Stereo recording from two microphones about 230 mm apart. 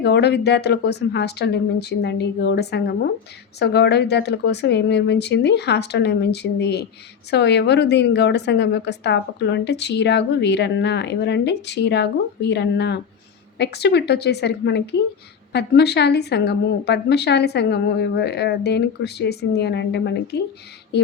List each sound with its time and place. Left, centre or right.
0.0 s a woman's voice: left